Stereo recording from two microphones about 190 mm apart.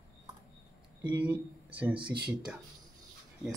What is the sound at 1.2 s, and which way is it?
A man's voice, 10° right (ahead or behind).